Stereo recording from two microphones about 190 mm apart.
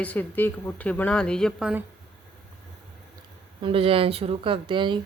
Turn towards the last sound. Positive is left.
turn(degrees=-25)  # may be behind; listen again after turning